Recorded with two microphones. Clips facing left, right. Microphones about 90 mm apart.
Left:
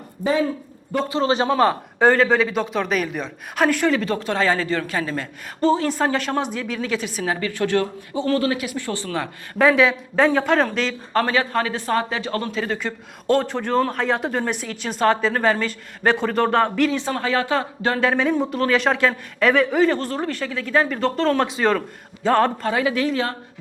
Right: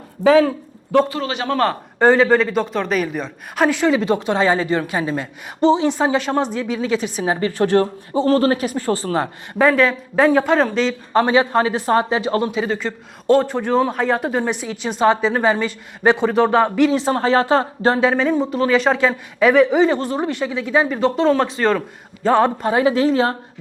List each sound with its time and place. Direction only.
0.3 s a man's voice: 90° right
1.1 s a man's voice: 30° left (ahead or behind)
1.5 s a man's voice: 15° left (ahead or behind)
2.0 s a woman's voice: centre (ahead or behind); by 5.9 s 20° right (ahead or behind)
5.9 s a woman's voice: 5° right (ahead or behind)
7.2 s speech: 30° right (ahead or behind)
10.2 s a woman's voice: 5° right (ahead or behind)
11.1 s a man's voice: 20° right (ahead or behind)
12.5 s a man's voice: 5° right (ahead or behind)
16.9 s speech: 30° right (ahead or behind)
18.0 s a man's voice: 5° right (ahead or behind)
22.6 s a man's voice: 25° right (ahead or behind)